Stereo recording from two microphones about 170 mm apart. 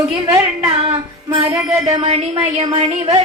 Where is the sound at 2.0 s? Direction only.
35° right (ahead or behind).